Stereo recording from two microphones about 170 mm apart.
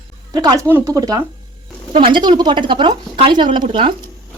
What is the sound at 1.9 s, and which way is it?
A woman's voice, 30° right (ahead or behind).